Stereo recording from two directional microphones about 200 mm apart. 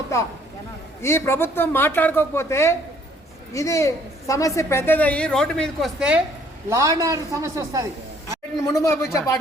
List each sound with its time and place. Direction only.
1.0 s a woman's voice: 10° left (ahead or behind); by 6.2 s 5° right (ahead or behind)
6.7 s a man's voice: 15° right (ahead or behind)
8.6 s a woman's voice: 15° left (ahead or behind)